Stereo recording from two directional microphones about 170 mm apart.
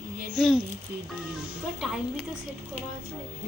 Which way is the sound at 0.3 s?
Centre (ahead or behind).